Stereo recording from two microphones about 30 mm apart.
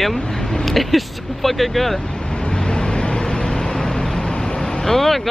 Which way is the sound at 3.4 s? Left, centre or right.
Left.